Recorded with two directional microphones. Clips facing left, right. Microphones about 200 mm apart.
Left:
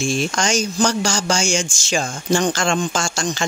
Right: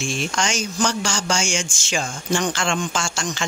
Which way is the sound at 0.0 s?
40° left (ahead or behind).